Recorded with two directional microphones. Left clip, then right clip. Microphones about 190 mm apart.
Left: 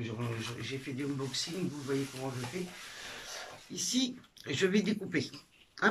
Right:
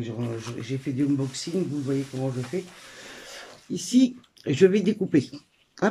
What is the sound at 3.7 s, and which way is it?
Speech, 40° right (ahead or behind).